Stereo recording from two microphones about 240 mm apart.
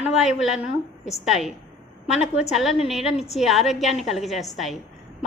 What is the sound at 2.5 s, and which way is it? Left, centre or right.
A woman's voice, centre.